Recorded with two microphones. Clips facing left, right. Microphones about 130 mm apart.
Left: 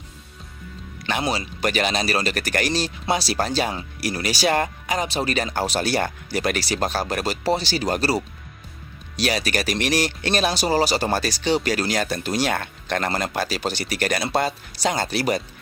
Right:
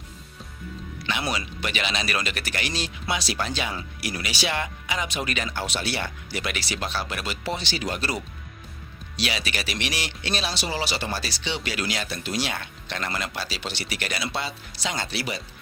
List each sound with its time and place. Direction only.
1.2 s speech: 30° left (ahead or behind)
1.6 s speech: 45° left (ahead or behind)